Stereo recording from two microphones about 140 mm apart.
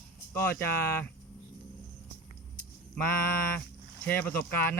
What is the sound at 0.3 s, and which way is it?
Speech, 15° left (ahead or behind).